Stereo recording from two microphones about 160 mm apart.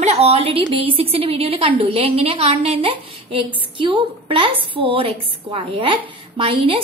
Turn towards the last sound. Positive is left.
turn(degrees=-35)  # may be behind; listen again after turning